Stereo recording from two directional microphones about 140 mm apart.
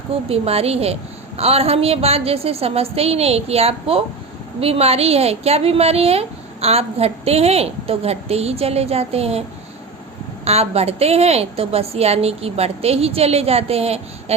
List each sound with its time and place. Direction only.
0.1 s a woman's voice: 45° right (ahead or behind)
10.4 s a woman's voice: 45° right (ahead or behind)